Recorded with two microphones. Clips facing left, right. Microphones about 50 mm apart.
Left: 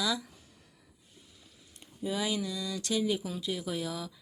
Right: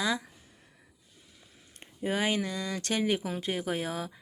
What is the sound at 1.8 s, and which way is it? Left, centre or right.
Speech, right.